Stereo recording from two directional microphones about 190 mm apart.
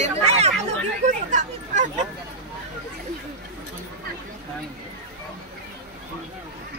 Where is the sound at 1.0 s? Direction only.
40° right (ahead or behind).